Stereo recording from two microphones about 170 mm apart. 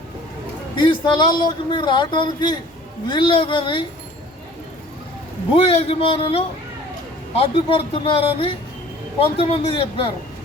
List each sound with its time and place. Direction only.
0.8 s a man's voice: 25° left (ahead or behind)
5.5 s a man's voice: 35° left (ahead or behind)